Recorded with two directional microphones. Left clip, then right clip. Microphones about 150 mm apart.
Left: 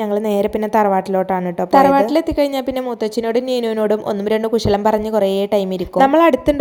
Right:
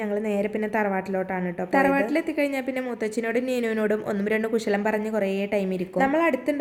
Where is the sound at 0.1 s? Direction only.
40° left (ahead or behind).